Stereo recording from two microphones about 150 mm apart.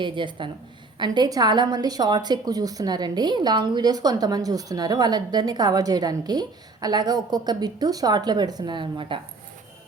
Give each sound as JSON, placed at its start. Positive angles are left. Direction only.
{"t": 0.0, "sound": "a woman's voice", "side_deg": -30}